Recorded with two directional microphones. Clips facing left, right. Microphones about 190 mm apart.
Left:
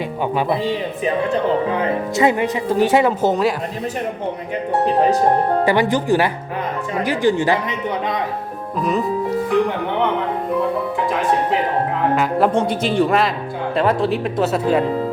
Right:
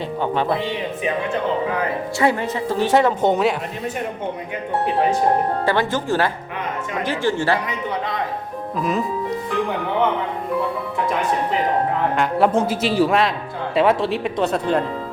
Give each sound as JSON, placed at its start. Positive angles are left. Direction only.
{"t": 1.8, "sound": "speech", "side_deg": 20}
{"t": 5.6, "sound": "speech", "side_deg": 15}
{"t": 12.1, "sound": "speech", "side_deg": 0}